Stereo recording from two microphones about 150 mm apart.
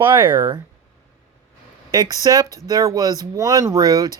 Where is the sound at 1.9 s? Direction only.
25° right (ahead or behind).